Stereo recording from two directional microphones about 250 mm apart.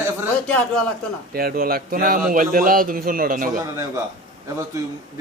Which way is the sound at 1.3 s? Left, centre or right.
Right.